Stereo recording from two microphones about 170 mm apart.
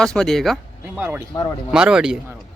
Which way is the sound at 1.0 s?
10° right (ahead or behind).